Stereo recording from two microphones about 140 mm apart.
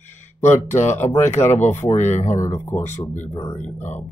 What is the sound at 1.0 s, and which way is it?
Speech, 15° left (ahead or behind).